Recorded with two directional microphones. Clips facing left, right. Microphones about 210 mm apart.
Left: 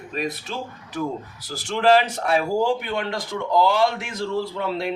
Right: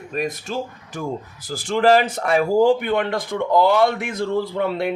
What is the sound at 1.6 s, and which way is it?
Speech, 50° right (ahead or behind).